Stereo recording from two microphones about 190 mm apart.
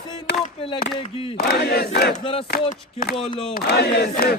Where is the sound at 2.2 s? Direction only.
30° left (ahead or behind).